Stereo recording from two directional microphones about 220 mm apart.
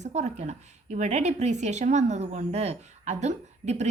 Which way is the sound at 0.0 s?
30° right (ahead or behind).